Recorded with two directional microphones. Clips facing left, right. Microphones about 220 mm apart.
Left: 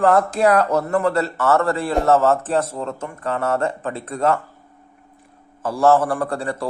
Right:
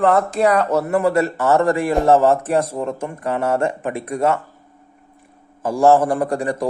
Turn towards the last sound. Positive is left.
turn(degrees=-15)  # may be behind; listen again after turning